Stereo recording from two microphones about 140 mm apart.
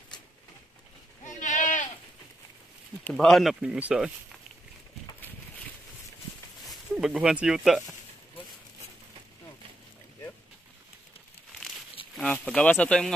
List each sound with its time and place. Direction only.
1.2 s sheep: 60° left (ahead or behind)
3.0 s speech: 5° left (ahead or behind)
6.7 s speech: centre (ahead or behind)
12.2 s speech: 5° left (ahead or behind)